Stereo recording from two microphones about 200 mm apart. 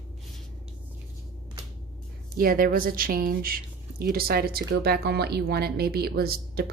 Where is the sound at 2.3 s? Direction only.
45° right (ahead or behind).